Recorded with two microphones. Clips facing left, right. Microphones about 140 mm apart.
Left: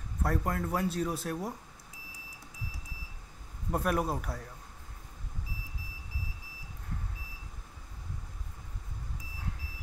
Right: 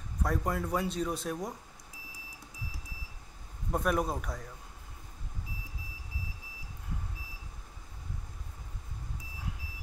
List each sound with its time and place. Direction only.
0.2 s speech: 5° left (ahead or behind)
3.7 s speech: 5° left (ahead or behind)